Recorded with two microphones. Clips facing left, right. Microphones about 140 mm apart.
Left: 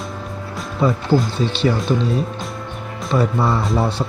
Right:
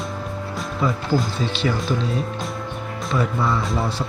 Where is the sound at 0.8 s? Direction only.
30° left (ahead or behind).